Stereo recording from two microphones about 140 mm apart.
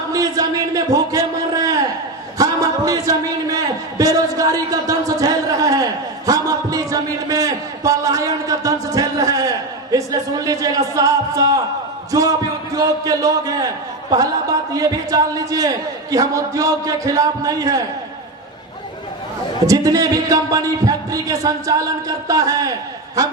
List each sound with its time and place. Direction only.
0.1 s a sound: 25° right (ahead or behind)
12.1 s a man's voice: 25° right (ahead or behind)
14.7 s a man's voice: 25° right (ahead or behind)
19.6 s a man's voice: 25° right (ahead or behind)